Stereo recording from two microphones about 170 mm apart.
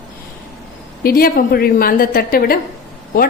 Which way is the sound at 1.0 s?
60° left (ahead or behind).